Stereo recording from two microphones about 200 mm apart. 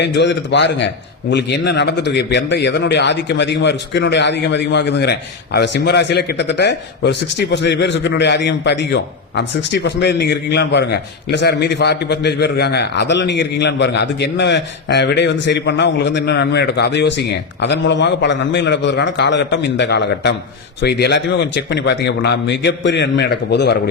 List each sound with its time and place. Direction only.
0.0 s speech: 60° left (ahead or behind)